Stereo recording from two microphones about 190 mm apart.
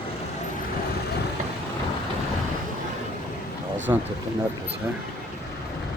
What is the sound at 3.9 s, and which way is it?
Speech, 20° right (ahead or behind).